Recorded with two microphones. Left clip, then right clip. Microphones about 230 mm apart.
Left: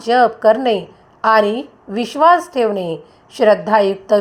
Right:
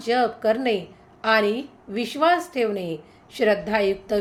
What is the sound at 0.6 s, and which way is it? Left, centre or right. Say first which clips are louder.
A woman's voice: left 7 dB; centre.